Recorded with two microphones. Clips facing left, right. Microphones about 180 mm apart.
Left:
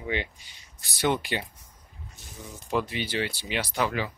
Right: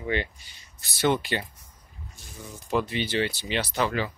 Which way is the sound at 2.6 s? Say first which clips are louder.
Right 2 dB; 10° left (ahead or behind).